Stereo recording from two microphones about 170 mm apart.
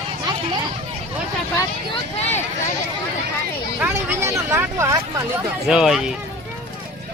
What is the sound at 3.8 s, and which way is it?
Speech, 15° right (ahead or behind).